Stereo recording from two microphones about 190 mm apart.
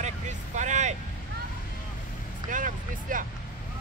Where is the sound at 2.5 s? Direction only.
45° right (ahead or behind).